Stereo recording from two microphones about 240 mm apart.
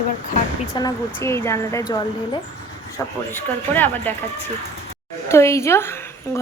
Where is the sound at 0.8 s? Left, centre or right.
Centre.